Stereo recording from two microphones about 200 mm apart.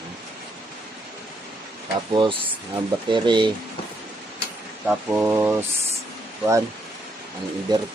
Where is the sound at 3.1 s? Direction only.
25° right (ahead or behind).